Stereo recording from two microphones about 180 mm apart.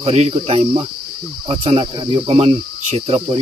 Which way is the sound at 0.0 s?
35° right (ahead or behind).